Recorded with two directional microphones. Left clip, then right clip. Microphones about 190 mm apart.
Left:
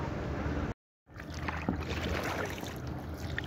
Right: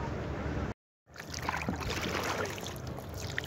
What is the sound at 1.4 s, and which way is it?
Rowboat, 45° right (ahead or behind).